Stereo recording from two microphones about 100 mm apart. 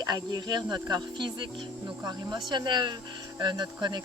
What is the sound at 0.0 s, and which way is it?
Speech, 40° right (ahead or behind).